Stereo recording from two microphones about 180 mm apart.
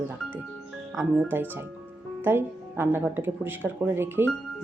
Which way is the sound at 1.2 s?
10° right (ahead or behind).